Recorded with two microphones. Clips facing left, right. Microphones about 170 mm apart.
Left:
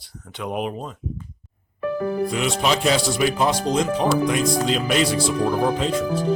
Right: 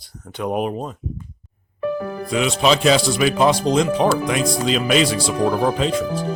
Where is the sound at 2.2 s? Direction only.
90° right.